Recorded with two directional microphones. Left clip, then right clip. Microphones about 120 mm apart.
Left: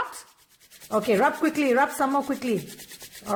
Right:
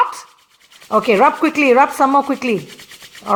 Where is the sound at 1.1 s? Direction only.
45° right (ahead or behind).